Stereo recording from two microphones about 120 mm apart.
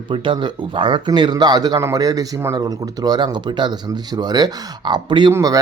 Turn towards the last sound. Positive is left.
turn(degrees=-40)  # may be behind; listen again after turning